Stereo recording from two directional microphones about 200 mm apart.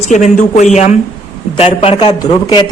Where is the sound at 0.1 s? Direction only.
40° left (ahead or behind).